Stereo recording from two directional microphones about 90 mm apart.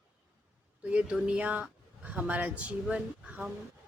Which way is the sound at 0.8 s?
15° right (ahead or behind).